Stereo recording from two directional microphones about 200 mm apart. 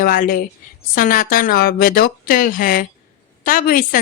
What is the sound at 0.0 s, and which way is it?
A woman's voice, 45° left (ahead or behind).